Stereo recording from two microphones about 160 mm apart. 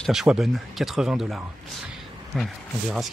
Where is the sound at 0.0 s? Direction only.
Centre (ahead or behind).